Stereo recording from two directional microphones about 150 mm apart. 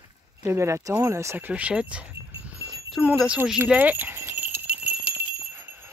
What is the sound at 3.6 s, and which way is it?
Jingle bell, 10° right (ahead or behind).